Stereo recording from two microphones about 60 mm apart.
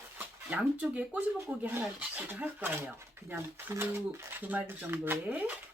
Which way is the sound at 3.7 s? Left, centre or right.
Right.